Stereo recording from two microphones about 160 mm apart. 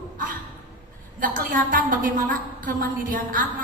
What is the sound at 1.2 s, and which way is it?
A woman's voice, 60° right (ahead or behind).